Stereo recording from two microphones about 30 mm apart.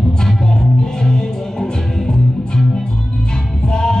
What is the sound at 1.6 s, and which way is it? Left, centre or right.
Music, left.